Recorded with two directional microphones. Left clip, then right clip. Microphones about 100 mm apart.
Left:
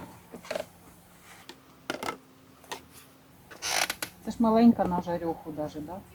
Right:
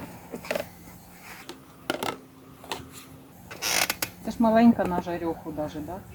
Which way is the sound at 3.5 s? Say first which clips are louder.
Right 3 dB; 90° right.